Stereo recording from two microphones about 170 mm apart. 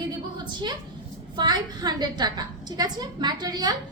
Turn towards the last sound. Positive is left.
turn(degrees=-25)  # may be behind; listen again after turning